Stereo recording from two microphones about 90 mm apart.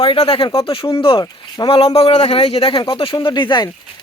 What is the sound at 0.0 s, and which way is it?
Speech, 80° left.